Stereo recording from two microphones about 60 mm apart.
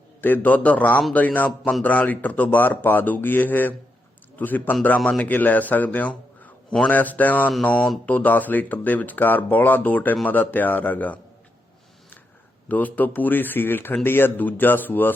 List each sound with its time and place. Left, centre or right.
0.2 s a man's voice: left
12.6 s speech: left